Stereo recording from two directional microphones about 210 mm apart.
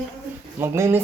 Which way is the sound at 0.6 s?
15° right (ahead or behind).